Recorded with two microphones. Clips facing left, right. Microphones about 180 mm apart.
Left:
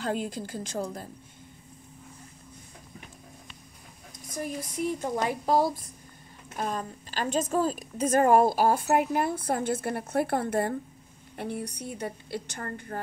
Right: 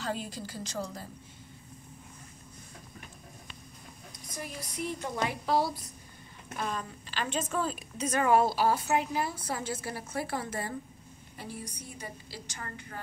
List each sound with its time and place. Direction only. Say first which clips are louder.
0.0 s a woman's voice: left 5 dB; 50° left (ahead or behind)
4.3 s a woman's voice: left 7 dB; 45° left (ahead or behind)